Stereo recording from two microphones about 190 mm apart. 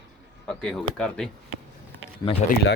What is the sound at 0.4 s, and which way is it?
Speech, 5° left (ahead or behind).